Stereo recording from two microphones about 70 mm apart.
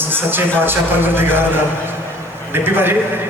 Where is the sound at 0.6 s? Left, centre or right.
Right.